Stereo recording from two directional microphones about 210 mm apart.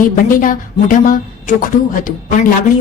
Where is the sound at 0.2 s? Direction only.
40° left (ahead or behind).